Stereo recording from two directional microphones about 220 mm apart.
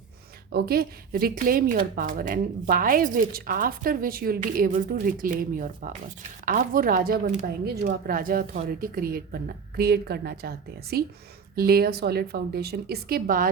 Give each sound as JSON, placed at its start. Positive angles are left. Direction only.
{"t": 0.5, "sound": "speech", "side_deg": -45}